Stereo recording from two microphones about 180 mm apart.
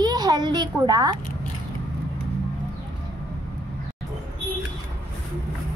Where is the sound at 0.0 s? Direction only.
20° right (ahead or behind).